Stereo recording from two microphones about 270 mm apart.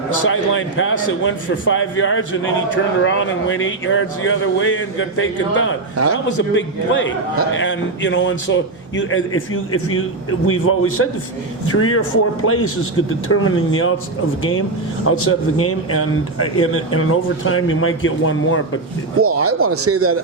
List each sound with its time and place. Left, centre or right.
0.3 s a man's voice: left
15.0 s a man's voice: left
19.2 s speech: right